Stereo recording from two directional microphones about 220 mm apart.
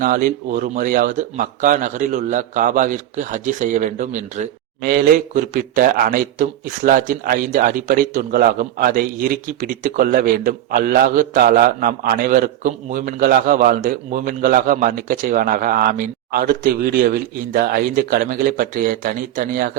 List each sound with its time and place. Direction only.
0.0 s a man's voice: 40° right (ahead or behind)